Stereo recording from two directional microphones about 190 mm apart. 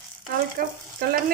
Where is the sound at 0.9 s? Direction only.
50° right (ahead or behind).